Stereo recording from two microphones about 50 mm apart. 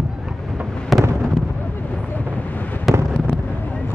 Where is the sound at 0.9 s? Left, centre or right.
Centre.